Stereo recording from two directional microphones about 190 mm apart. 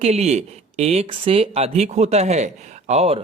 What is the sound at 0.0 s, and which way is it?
Speech, 35° right (ahead or behind).